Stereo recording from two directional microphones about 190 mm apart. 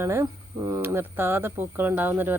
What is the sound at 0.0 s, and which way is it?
Speech, 15° right (ahead or behind).